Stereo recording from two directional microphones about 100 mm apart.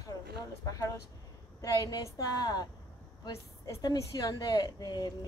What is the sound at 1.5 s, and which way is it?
Speech, 45° left (ahead or behind).